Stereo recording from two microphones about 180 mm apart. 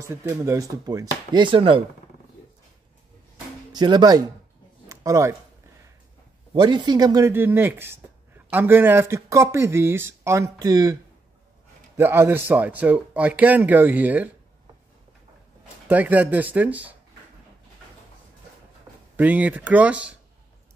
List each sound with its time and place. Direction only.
0.0 s speech: 15° right (ahead or behind)
3.7 s speech: 25° right (ahead or behind)
4.8 s a sound: 15° right (ahead or behind)
6.5 s speech: 25° right (ahead or behind)
12.0 s speech: 10° right (ahead or behind)
15.9 s speech: 10° right (ahead or behind)
19.1 s speech: 10° right (ahead or behind)